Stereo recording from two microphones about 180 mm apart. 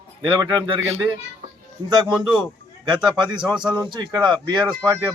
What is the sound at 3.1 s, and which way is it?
Speech, 25° right (ahead or behind).